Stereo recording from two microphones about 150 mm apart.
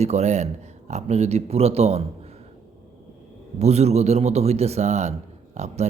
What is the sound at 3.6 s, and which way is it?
Speech, 45° right (ahead or behind).